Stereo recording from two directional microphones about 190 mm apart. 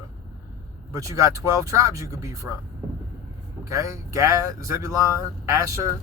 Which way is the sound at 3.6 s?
15° right (ahead or behind).